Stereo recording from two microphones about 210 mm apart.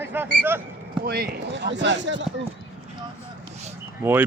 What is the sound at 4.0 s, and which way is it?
Speech, 10° right (ahead or behind).